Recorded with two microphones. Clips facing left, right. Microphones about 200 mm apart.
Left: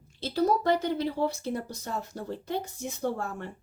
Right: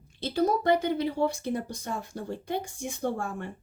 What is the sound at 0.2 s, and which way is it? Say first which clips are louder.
Speech: even; 15° right (ahead or behind).